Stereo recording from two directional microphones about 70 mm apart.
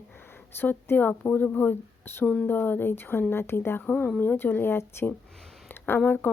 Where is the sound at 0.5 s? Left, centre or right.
Left.